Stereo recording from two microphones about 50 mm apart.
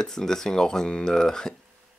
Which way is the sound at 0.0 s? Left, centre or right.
Centre.